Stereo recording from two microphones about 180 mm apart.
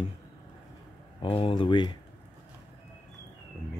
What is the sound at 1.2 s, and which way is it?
Speech, 30° left (ahead or behind).